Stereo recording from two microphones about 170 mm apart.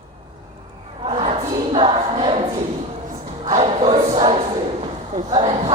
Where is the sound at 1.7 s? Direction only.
30° right (ahead or behind).